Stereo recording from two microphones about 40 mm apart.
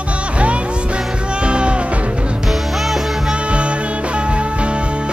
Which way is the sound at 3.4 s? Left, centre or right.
Right.